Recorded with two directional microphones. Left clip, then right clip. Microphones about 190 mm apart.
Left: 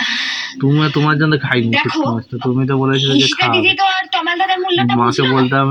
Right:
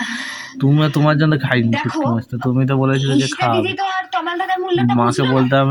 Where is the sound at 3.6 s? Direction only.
60° right (ahead or behind).